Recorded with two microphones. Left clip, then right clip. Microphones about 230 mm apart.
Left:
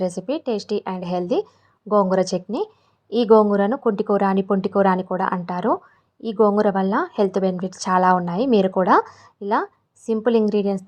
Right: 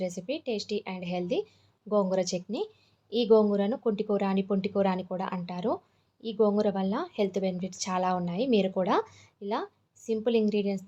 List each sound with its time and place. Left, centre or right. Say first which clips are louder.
0.0 s a woman's voice: left 9 dB; left